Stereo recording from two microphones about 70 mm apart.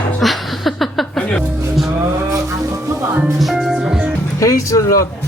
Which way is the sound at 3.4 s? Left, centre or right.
Centre.